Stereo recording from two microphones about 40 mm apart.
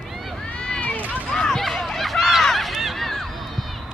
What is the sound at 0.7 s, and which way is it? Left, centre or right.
Run, left.